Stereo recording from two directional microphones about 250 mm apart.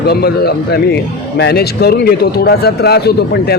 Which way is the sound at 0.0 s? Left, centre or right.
Left.